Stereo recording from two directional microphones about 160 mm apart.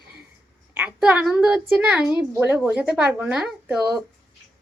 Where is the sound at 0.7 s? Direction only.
10° right (ahead or behind).